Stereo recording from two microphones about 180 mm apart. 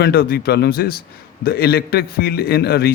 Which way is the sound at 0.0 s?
60° left (ahead or behind).